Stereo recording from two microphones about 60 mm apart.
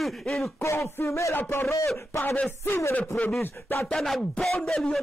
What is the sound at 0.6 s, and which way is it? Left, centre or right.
Speech, left.